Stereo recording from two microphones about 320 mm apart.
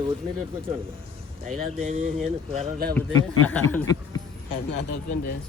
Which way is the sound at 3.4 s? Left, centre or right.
Centre.